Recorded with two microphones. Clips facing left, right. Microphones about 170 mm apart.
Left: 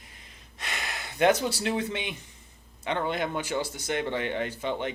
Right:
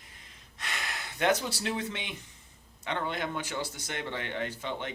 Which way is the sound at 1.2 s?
15° left (ahead or behind).